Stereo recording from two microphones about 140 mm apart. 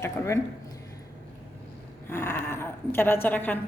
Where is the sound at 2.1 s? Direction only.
20° left (ahead or behind).